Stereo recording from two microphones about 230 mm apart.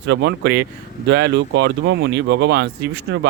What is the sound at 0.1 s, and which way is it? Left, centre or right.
Speech, right.